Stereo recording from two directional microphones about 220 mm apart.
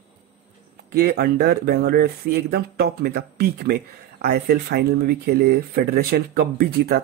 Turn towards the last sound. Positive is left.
turn(degrees=-45)  # may be behind; listen again after turning